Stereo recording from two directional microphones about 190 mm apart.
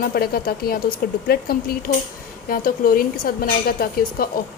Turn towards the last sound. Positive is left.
turn(degrees=55)  # may be behind; listen again after turning